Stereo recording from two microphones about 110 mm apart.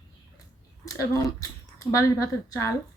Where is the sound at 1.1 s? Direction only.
30° left (ahead or behind).